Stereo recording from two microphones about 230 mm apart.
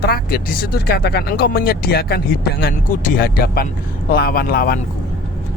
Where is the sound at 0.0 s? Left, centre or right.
Left.